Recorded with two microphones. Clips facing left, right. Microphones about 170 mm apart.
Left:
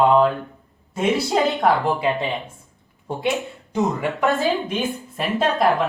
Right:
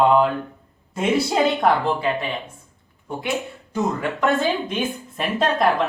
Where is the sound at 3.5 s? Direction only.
20° left (ahead or behind).